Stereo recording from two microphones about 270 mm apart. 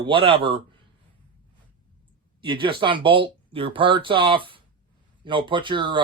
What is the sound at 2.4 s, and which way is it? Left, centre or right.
Speech, centre.